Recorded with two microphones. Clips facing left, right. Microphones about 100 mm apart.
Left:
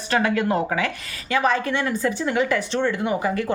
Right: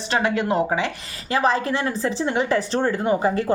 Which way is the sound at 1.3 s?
35° right (ahead or behind).